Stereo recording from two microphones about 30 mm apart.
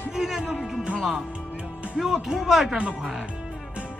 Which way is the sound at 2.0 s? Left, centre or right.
Centre.